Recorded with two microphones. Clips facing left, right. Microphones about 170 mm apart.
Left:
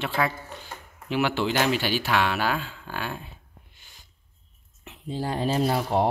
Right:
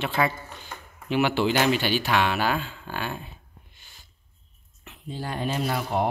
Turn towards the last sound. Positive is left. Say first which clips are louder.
# left 3 dB
turn(degrees=30)  # may be behind; listen again after turning